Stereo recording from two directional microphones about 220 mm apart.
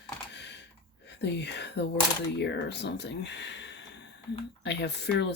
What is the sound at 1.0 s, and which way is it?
Speech, 50° left (ahead or behind).